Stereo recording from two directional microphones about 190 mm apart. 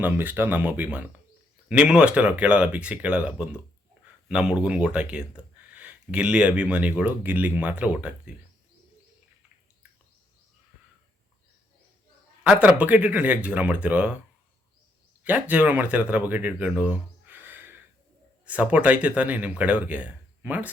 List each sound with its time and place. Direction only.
0.0 s speech: 10° right (ahead or behind)
12.4 s speech: 5° right (ahead or behind)
15.2 s speech: 10° right (ahead or behind)